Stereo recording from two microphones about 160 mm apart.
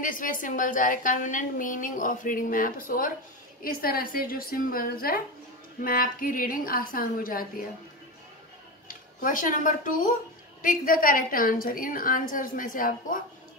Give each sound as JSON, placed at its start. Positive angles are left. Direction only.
{"t": 0.0, "sound": "a woman's voice", "side_deg": 55}
{"t": 9.2, "sound": "a woman's voice", "side_deg": 55}